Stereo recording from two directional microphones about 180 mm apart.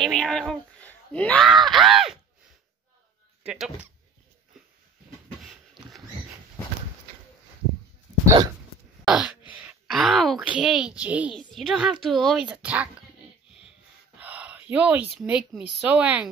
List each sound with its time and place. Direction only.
0.0 s speech: 5° left (ahead or behind)
3.4 s speech: 5° right (ahead or behind)
9.0 s a sound: 5° right (ahead or behind)
9.5 s speech: 10° right (ahead or behind)
14.2 s speech: 10° right (ahead or behind)